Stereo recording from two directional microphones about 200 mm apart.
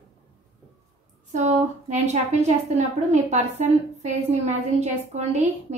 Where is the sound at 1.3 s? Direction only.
35° right (ahead or behind).